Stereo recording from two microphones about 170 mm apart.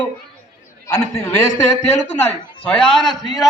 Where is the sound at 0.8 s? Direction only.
20° left (ahead or behind).